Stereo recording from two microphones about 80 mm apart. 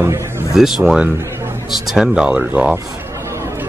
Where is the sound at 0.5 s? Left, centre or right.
Centre.